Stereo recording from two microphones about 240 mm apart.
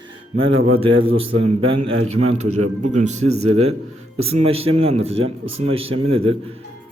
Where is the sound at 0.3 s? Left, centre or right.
Right.